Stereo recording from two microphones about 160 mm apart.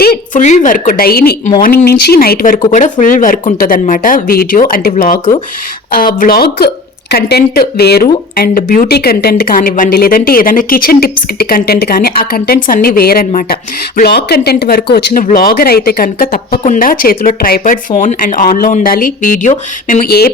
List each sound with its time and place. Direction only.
0.0 s a sound: 70° left (ahead or behind)
0.4 s speech: 50° left (ahead or behind); by 6.7 s 75° left (ahead or behind)
7.1 s speech: 85° left
8.4 s a woman's voice: 65° left (ahead or behind); by 15.2 s 85° left
15.2 s speech: 60° left (ahead or behind)